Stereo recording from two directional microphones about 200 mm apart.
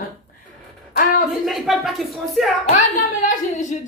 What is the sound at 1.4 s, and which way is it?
Speech, centre (ahead or behind).